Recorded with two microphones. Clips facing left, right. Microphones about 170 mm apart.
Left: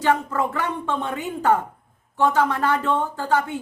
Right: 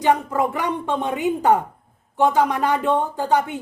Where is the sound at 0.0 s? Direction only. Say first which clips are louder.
Right 2 dB; 15° right (ahead or behind).